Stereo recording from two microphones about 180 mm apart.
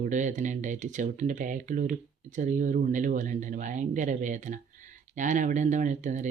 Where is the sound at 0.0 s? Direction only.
45° right (ahead or behind).